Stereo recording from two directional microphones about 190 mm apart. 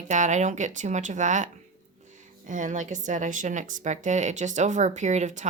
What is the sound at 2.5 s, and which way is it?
A woman's voice, 40° right (ahead or behind).